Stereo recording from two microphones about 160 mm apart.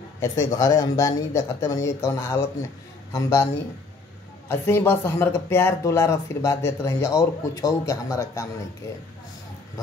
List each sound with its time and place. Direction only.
0.6 s a man's voice: 25° left (ahead or behind)
4.5 s speech: 15° left (ahead or behind)